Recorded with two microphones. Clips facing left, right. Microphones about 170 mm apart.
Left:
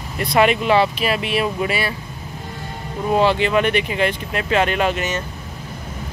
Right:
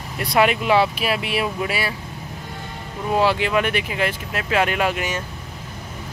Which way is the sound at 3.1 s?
5° right (ahead or behind).